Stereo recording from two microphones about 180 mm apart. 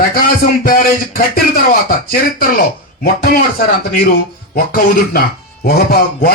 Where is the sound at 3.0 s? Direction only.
55° left (ahead or behind).